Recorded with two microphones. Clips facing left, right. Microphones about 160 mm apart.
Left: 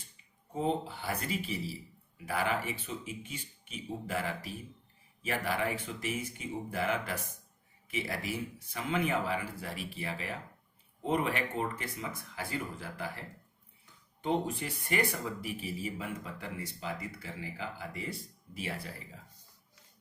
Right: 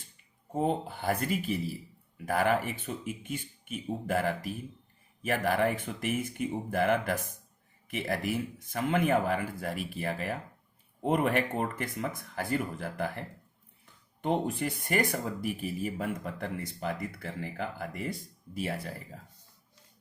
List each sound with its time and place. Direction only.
0.5 s speech: 55° right (ahead or behind)